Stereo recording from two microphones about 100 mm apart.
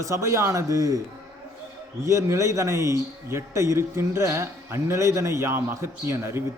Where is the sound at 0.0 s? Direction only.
30° right (ahead or behind).